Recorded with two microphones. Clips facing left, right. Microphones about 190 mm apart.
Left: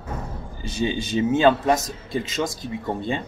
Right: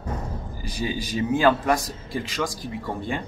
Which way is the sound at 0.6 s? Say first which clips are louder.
Left 4 dB; 25° left (ahead or behind).